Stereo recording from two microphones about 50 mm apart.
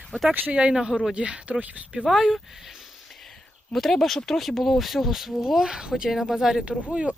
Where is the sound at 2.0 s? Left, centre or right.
Centre.